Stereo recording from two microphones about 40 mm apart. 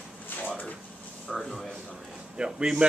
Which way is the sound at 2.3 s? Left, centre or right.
Right.